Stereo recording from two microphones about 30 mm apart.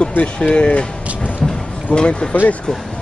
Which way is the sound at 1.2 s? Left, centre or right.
Left.